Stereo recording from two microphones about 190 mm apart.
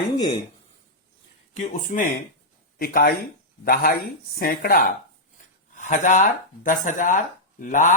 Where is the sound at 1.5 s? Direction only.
40° left (ahead or behind).